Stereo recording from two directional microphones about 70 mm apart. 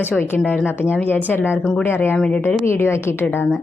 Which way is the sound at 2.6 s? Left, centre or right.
Left.